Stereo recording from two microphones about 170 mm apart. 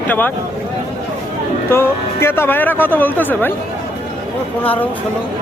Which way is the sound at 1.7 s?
15° left (ahead or behind).